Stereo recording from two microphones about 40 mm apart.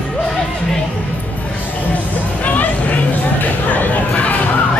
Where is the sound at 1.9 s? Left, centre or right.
Left.